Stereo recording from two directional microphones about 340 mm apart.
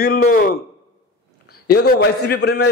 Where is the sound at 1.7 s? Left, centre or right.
Left.